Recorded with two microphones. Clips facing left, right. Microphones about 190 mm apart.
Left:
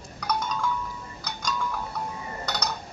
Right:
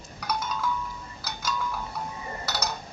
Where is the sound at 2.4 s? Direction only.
5° right (ahead or behind).